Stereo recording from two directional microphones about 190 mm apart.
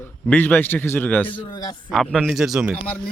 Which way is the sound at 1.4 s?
20° left (ahead or behind).